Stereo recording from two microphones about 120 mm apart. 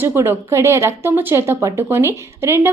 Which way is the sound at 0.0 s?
20° right (ahead or behind).